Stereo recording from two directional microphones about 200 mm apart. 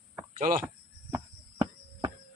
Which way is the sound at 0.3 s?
45° right (ahead or behind).